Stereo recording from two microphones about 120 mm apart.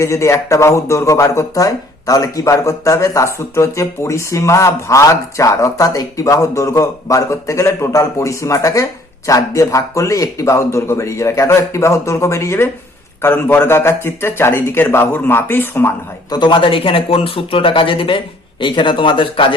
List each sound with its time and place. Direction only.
0.0 s speech: 25° left (ahead or behind)
16.3 s speech: 40° left (ahead or behind)